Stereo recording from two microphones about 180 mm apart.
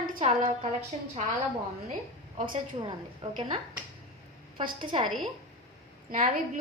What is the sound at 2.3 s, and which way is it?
Speech, 45° right (ahead or behind).